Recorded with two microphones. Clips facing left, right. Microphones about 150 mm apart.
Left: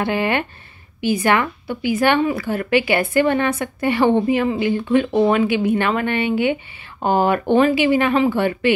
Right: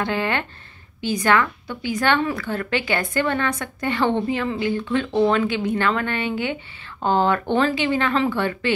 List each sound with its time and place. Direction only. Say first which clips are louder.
0.0 s a woman's voice: left 4 dB; 15° left (ahead or behind)